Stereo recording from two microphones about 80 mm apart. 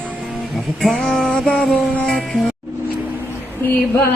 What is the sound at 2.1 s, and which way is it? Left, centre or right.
Speech, centre.